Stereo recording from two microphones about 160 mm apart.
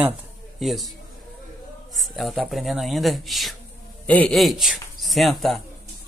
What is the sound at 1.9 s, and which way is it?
Speech, centre (ahead or behind).